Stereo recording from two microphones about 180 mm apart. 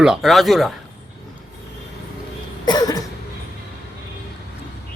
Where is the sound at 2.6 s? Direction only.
20° left (ahead or behind).